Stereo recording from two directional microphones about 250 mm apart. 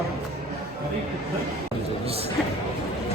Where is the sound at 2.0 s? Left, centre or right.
Right.